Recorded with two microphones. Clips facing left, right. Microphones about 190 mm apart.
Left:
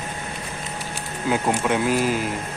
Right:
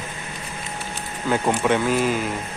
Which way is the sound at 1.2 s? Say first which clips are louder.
Right 1 dB; 5° left (ahead or behind).